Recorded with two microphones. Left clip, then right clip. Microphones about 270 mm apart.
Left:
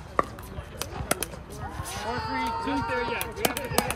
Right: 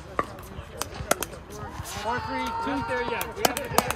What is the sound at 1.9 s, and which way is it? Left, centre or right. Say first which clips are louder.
Run: right 2 dB; centre.